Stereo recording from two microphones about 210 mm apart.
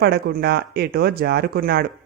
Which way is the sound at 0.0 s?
50° right (ahead or behind).